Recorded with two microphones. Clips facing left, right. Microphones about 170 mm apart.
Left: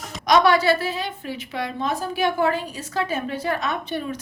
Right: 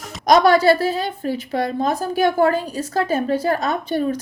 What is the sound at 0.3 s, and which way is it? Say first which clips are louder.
A woman's voice: right 4 dB; 40° right (ahead or behind).